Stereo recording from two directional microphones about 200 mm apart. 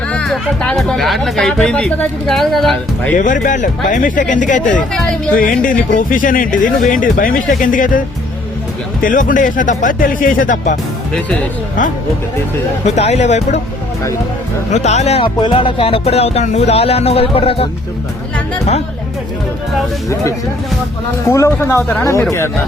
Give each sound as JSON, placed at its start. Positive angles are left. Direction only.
{"t": 0.1, "sound": "speech", "side_deg": 5}
{"t": 3.2, "sound": "speech", "side_deg": 40}
{"t": 12.8, "sound": "speech", "side_deg": 35}
{"t": 14.7, "sound": "speech", "side_deg": 35}
{"t": 21.2, "sound": "speech", "side_deg": 15}